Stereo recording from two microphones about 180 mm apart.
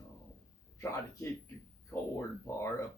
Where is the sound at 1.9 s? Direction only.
15° left (ahead or behind).